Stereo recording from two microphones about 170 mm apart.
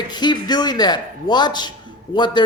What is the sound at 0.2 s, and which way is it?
A man's voice, 25° left (ahead or behind).